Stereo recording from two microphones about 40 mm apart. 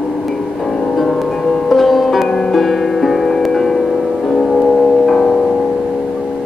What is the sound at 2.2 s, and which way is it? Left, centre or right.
Music, centre.